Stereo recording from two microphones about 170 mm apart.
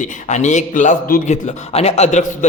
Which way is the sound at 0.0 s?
45° left (ahead or behind).